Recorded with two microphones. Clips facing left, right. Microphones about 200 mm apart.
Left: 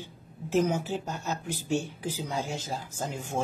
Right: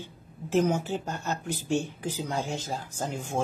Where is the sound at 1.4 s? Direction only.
50° right (ahead or behind).